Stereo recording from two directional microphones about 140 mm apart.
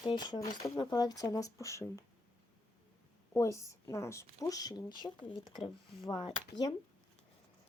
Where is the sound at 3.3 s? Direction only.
20° left (ahead or behind).